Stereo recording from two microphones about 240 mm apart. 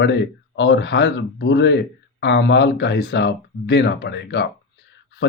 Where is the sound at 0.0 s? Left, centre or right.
Left.